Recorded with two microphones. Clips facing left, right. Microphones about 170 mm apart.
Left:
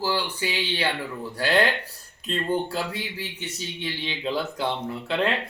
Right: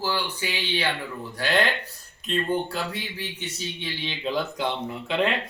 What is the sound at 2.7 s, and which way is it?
A man's voice, 10° left (ahead or behind).